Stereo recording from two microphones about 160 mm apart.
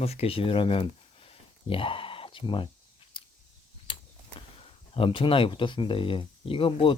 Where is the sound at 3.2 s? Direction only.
30° left (ahead or behind).